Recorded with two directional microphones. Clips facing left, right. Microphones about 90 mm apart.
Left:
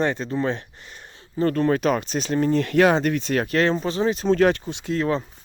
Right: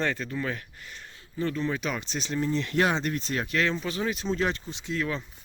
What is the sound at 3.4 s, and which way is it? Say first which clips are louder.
Speech: left 5 dB; 40° left (ahead or behind).